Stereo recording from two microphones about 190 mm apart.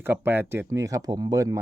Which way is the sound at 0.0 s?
10° right (ahead or behind).